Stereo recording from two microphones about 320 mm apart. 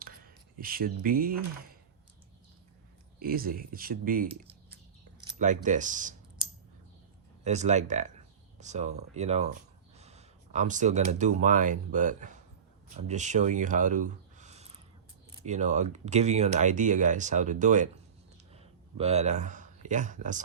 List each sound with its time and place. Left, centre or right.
0.6 s speech: right
3.2 s speech: right
5.2 s mechanisms: right
7.4 s speech: right
18.5 s a sound: centre